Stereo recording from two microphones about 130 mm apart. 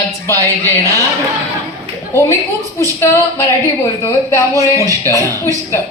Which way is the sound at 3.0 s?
20° left (ahead or behind).